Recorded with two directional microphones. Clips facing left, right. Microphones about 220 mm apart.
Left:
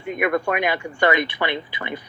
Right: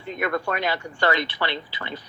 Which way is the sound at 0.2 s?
15° left (ahead or behind).